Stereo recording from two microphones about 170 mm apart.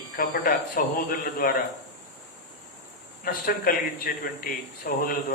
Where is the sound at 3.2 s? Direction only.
55° left (ahead or behind).